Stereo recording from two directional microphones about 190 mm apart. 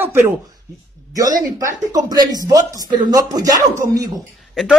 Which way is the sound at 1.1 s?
15° right (ahead or behind).